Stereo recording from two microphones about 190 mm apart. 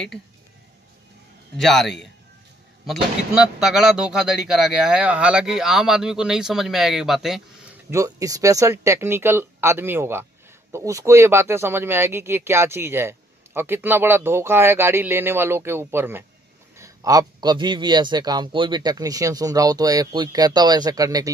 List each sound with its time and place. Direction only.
1.6 s speech: centre (ahead or behind)
7.9 s a man's voice: 15° right (ahead or behind)